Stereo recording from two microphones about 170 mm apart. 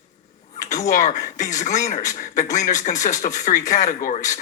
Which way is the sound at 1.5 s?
45° left (ahead or behind).